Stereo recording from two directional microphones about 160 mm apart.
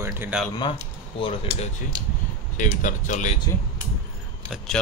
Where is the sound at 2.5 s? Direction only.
50° left (ahead or behind).